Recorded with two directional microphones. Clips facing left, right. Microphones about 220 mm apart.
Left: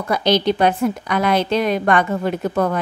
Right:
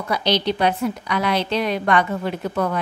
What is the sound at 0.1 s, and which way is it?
A woman's voice, 50° left (ahead or behind).